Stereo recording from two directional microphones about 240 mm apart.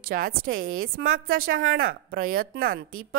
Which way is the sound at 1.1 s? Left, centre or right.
Right.